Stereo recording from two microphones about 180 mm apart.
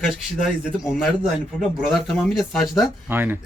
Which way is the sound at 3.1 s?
10° right (ahead or behind).